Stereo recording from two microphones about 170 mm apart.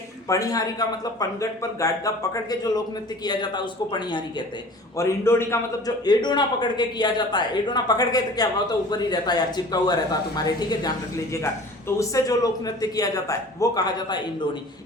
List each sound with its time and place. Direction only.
0.3 s a man's voice: 20° left (ahead or behind)
4.9 s a man's voice: 15° left (ahead or behind)